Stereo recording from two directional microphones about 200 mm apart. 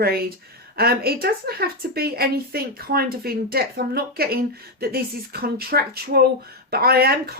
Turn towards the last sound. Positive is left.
turn(degrees=-50)  # may be behind; listen again after turning